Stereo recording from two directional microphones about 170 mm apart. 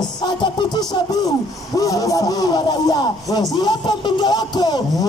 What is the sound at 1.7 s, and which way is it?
A man's voice, 20° left (ahead or behind).